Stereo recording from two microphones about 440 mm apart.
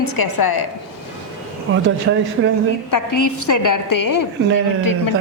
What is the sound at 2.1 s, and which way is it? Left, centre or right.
Speech, right.